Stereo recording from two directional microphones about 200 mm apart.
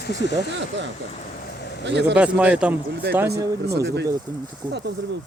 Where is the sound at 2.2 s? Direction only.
5° right (ahead or behind).